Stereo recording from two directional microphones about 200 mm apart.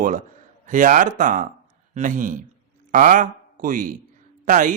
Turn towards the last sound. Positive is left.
turn(degrees=-40)  # may be behind; listen again after turning